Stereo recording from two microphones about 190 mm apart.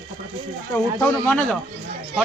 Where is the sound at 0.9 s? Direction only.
5° left (ahead or behind).